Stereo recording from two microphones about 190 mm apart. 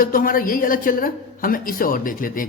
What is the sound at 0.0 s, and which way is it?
A woman's voice, 50° left (ahead or behind).